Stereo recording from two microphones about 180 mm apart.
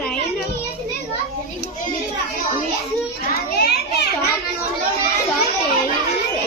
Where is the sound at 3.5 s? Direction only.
65° left (ahead or behind).